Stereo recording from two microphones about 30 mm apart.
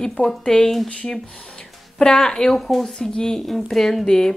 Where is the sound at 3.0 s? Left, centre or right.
Left.